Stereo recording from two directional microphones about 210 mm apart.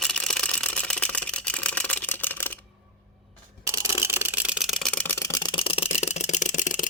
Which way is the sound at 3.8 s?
10° right (ahead or behind).